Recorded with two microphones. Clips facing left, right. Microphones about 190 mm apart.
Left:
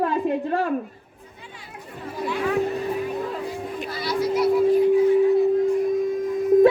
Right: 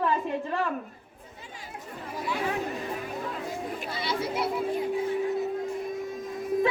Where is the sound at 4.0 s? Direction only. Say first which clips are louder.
Left 8 dB; 25° right (ahead or behind).